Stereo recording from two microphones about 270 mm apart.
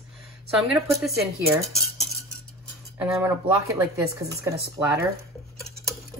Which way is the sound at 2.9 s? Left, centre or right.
Centre.